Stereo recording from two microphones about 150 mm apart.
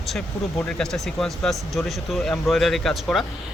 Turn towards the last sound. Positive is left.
turn(degrees=5)  # may be behind; listen again after turning